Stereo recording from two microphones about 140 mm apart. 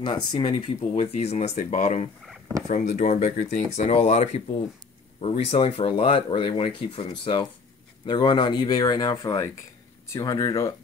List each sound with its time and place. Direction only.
0.0 s speech: 35° left (ahead or behind)
0.9 s speech: 50° left (ahead or behind); by 10.7 s 20° left (ahead or behind)